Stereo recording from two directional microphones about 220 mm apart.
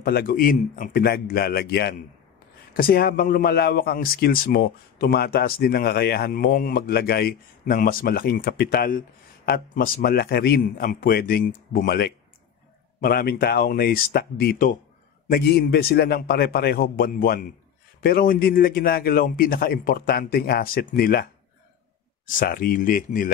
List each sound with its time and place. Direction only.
0.0 s speech: 45° left (ahead or behind)